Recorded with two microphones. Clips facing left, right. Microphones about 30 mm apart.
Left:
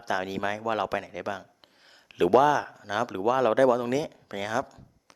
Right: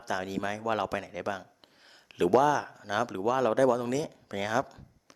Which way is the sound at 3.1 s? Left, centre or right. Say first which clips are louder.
Left 4 dB; centre.